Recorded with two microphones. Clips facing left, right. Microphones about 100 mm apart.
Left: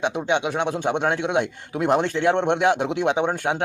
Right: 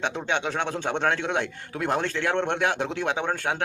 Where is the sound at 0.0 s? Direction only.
15° left (ahead or behind).